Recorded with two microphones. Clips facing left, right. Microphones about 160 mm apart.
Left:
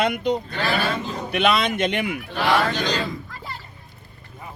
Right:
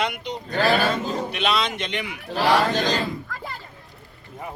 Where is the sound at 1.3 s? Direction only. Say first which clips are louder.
Left 8 dB; 55° left (ahead or behind).